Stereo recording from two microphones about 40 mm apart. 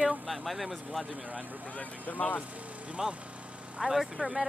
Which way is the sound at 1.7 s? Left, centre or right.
Left.